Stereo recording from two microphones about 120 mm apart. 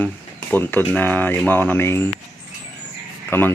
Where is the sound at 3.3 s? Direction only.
20° left (ahead or behind).